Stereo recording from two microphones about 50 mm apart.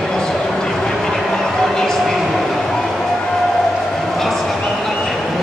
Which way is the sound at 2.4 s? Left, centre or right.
Centre.